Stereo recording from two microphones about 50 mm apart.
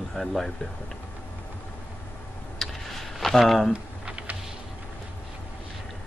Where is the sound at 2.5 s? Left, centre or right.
Centre.